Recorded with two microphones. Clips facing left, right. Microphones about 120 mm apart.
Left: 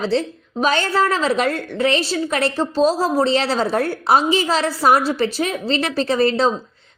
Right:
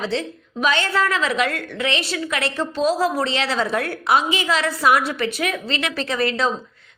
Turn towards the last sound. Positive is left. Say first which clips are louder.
# left 5 dB
turn(degrees=35)  # may be behind; listen again after turning